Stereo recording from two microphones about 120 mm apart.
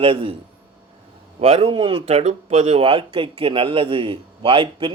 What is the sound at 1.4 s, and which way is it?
Speech, 60° right (ahead or behind).